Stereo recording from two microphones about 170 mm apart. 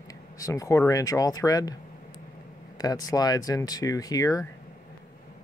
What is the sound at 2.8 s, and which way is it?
Speech, 20° left (ahead or behind).